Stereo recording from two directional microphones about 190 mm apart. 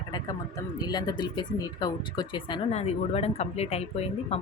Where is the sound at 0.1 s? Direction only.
20° left (ahead or behind).